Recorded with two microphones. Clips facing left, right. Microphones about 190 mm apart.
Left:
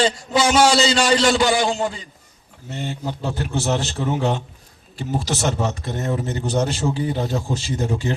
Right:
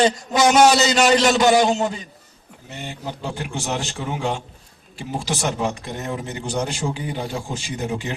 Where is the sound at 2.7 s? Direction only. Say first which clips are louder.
Left 4 dB; 15° right (ahead or behind).